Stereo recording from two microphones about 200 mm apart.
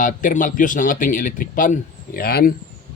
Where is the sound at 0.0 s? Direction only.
40° left (ahead or behind).